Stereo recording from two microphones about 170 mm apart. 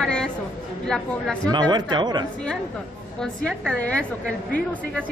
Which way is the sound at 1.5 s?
25° right (ahead or behind).